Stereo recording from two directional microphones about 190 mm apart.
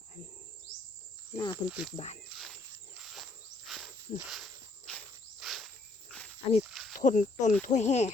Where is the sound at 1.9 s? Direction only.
35° left (ahead or behind).